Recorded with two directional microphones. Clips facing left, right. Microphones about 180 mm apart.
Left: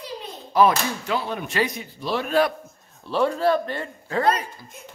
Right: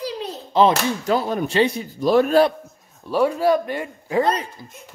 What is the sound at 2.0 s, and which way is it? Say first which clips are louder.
Speech: right 8 dB; 45° right (ahead or behind).